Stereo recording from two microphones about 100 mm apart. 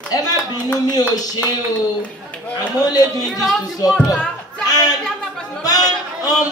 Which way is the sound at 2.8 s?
40° left (ahead or behind).